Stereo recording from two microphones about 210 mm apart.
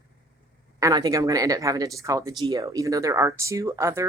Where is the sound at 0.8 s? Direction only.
15° right (ahead or behind).